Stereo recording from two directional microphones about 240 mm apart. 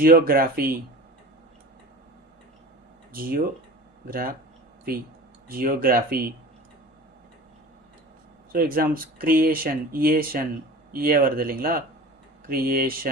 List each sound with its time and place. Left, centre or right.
0.0 s speech: right
3.1 s speech: right
5.5 s speech: right
8.5 s speech: right